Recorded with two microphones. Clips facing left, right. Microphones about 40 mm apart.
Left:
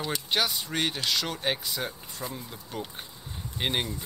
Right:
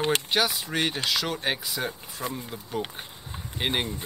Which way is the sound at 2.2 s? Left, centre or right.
Right.